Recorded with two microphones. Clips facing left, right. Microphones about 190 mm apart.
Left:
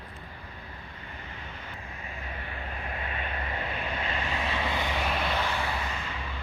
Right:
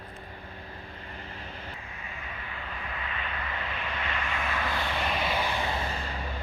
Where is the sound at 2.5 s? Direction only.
45° left (ahead or behind); by 4.9 s 15° left (ahead or behind).